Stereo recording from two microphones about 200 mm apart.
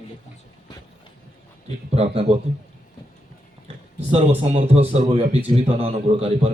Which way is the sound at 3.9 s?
30° right (ahead or behind).